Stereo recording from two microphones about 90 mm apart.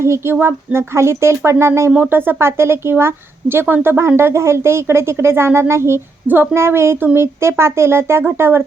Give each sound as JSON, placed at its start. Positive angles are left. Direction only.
{"t": 0.0, "sound": "speech", "side_deg": -30}